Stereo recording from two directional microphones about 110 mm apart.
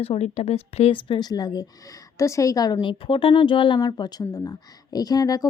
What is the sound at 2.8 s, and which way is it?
Speech, 50° left (ahead or behind).